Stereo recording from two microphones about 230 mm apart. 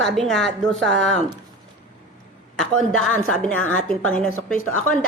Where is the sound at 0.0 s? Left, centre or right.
Centre.